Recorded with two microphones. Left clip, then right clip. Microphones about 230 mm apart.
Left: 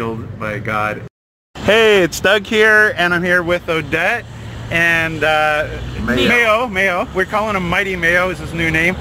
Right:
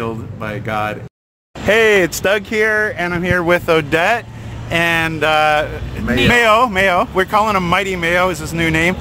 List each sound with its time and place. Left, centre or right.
0.0 s speech: centre
1.7 s speech: centre
3.3 s speech: right